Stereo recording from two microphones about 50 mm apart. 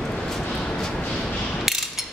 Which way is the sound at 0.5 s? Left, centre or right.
Centre.